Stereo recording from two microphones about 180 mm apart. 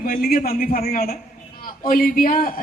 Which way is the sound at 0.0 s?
55° left (ahead or behind).